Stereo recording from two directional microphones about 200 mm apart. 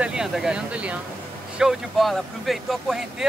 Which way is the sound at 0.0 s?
5° right (ahead or behind).